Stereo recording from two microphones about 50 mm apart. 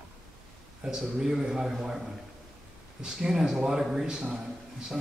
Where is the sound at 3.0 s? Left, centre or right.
Centre.